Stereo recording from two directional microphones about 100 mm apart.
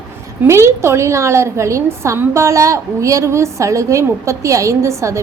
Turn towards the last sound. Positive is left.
turn(degrees=-30)  # may be behind; listen again after turning